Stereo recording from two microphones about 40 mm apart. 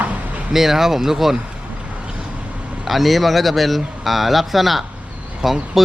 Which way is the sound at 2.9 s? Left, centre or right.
Centre.